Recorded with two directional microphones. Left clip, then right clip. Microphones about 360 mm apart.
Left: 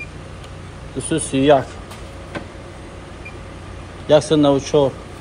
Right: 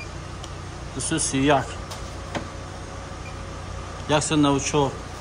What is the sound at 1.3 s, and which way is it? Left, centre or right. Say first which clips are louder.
Speech: left 7 dB; centre.